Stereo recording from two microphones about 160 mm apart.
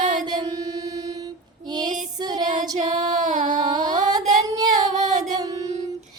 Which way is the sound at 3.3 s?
50° right (ahead or behind).